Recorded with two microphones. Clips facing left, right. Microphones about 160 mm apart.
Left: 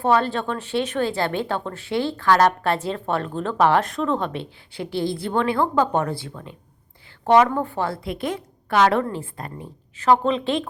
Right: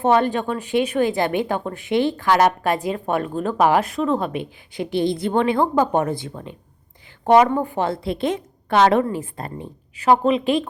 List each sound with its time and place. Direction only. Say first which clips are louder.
0.0 s a woman's voice: right 2 dB; 20° right (ahead or behind)
9.0 s a woman's voice: right 3 dB; 10° right (ahead or behind)